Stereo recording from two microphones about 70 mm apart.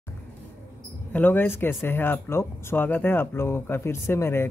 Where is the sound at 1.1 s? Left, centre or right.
Left.